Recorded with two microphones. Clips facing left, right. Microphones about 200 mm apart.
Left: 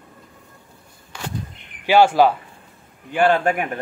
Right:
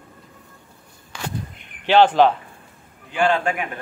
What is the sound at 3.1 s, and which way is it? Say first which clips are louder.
Speech: left 3 dB; 55° left (ahead or behind).